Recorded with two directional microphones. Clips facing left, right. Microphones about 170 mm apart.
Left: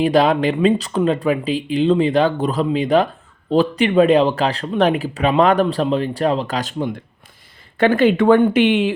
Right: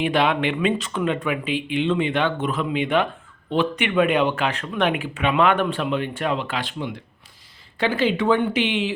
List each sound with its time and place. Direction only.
0.0 s speech: 40° left (ahead or behind)